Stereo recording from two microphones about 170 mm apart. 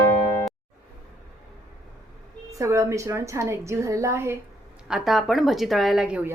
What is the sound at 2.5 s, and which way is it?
A woman's voice, 20° right (ahead or behind).